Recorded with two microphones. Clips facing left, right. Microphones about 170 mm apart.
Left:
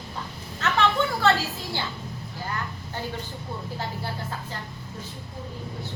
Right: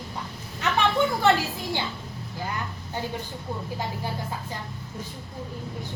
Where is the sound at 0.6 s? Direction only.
15° right (ahead or behind).